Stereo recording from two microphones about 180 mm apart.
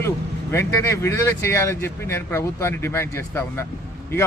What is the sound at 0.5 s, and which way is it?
A man's voice, 15° left (ahead or behind).